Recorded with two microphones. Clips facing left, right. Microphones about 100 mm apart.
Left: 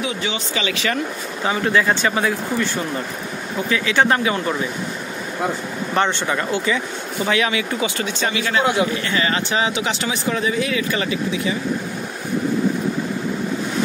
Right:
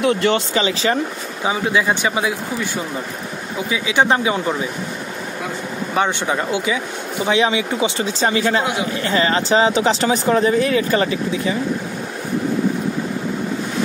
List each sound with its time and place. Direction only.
0.0 s speech: 60° right (ahead or behind)
0.6 s speech: 30° right (ahead or behind)
1.4 s speech: 15° right (ahead or behind)
5.9 s speech: 15° right (ahead or behind)
7.3 s speech: 25° right (ahead or behind)
8.1 s speech: 35° right (ahead or behind)